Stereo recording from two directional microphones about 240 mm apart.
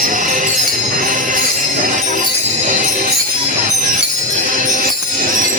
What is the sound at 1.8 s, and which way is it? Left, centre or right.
Music, right.